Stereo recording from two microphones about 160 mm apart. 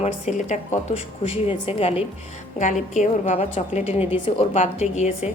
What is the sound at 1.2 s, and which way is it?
Speech, 35° left (ahead or behind).